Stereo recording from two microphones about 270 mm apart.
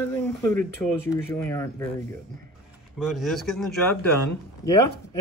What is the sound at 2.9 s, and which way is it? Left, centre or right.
Speech, centre.